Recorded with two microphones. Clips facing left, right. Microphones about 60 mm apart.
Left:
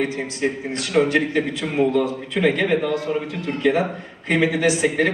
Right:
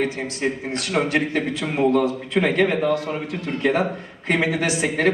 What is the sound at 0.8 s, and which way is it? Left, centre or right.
A man's voice, right.